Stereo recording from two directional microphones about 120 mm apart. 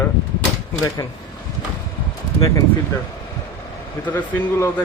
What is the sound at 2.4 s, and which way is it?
Speech, 25° left (ahead or behind).